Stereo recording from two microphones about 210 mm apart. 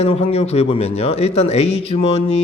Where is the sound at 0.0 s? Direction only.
30° left (ahead or behind).